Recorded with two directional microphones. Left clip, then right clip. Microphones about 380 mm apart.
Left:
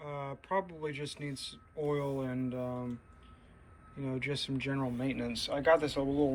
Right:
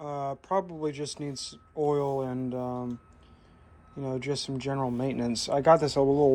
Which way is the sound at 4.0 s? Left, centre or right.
Centre.